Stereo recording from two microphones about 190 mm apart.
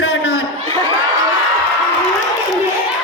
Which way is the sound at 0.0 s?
65° left (ahead or behind).